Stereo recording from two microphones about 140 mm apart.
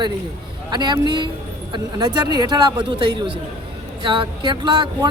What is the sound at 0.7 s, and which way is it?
Speech, 30° right (ahead or behind).